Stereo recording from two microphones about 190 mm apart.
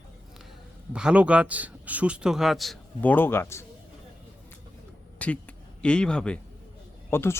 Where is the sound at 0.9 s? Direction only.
5° right (ahead or behind); by 3.6 s 15° left (ahead or behind).